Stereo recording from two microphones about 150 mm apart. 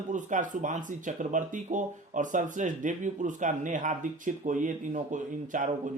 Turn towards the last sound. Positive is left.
turn(degrees=-60)  # may be behind; listen again after turning